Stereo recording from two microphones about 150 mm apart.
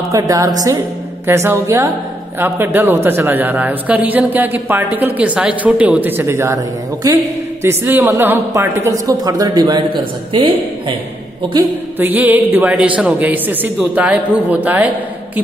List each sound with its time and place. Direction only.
0.1 s a man's voice: 25° right (ahead or behind)
12.0 s a man's voice: 10° right (ahead or behind)